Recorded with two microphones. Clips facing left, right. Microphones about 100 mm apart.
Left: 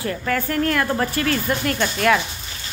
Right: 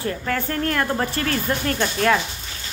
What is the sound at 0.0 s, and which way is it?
A woman's voice, 30° right (ahead or behind).